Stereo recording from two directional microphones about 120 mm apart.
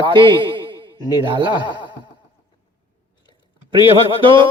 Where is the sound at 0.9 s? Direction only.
35° left (ahead or behind).